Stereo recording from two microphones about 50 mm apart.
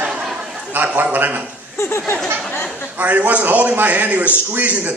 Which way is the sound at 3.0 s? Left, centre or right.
Right.